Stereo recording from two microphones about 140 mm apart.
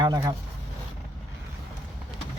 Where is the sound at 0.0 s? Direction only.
30° right (ahead or behind).